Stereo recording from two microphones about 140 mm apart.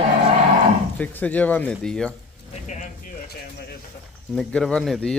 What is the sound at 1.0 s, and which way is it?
Speech, 10° left (ahead or behind).